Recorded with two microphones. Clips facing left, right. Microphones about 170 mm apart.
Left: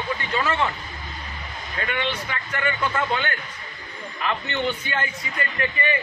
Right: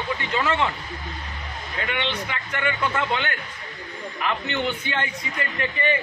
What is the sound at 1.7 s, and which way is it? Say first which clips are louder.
Speech: even; 20° right (ahead or behind).